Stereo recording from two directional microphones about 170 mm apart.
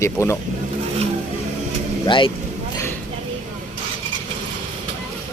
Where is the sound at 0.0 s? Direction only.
15° left (ahead or behind).